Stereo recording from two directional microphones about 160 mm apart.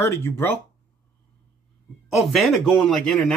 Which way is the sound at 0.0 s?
15° left (ahead or behind).